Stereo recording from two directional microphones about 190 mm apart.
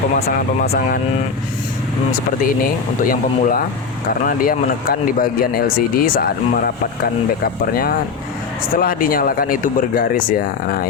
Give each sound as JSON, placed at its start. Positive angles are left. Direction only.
{"t": 2.4, "sound": "speech", "side_deg": 50}